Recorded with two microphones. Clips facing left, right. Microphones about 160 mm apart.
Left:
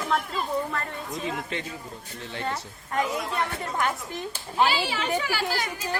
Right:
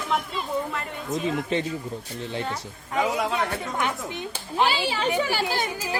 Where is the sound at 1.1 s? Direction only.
25° right (ahead or behind).